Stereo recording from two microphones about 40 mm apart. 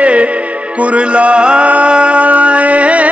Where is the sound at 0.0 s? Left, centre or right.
Right.